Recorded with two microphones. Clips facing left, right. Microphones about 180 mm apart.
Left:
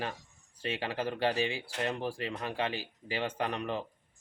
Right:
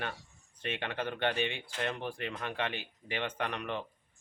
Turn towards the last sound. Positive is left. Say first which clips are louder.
# left 2 dB
turn(degrees=30)  # may be behind; listen again after turning